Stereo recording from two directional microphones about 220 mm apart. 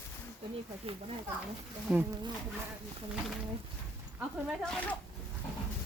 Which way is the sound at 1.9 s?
5° right (ahead or behind).